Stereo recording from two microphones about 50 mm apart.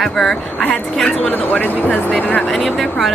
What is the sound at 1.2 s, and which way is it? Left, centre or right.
Speech, left.